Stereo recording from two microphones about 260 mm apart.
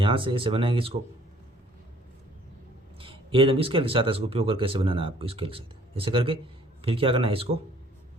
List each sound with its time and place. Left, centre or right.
0.0 s speech: centre
3.0 s speech: right